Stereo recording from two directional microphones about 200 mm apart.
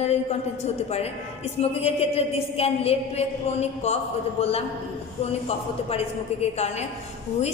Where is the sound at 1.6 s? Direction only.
30° left (ahead or behind).